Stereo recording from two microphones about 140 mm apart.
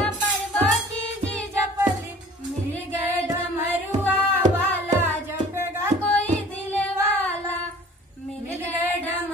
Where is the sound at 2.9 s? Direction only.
15° right (ahead or behind).